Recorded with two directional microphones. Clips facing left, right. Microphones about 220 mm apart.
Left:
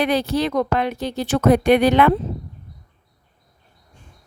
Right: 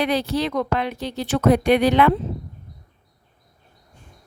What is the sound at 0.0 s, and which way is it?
Speech, 50° left (ahead or behind).